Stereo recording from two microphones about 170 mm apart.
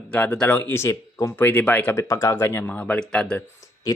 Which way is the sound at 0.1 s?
10° left (ahead or behind).